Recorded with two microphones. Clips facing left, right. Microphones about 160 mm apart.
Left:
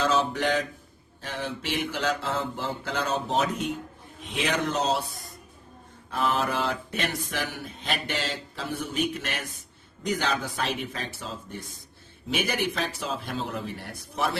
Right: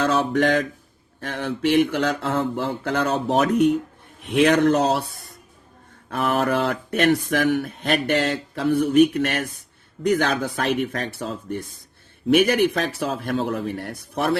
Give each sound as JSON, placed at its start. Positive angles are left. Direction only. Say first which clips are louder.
{"t": 0.0, "sound": "speech", "louder": "right 5 dB", "side_deg": -60}
{"t": 6.1, "sound": "speech", "louder": "right 5 dB", "side_deg": -60}